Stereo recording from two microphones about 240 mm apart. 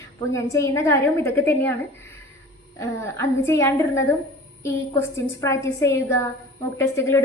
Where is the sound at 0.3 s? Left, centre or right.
Centre.